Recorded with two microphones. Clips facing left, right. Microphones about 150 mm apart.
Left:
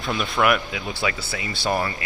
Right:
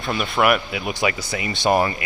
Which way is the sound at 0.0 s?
Centre (ahead or behind).